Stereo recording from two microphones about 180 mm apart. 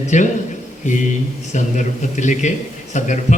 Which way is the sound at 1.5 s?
45° left (ahead or behind).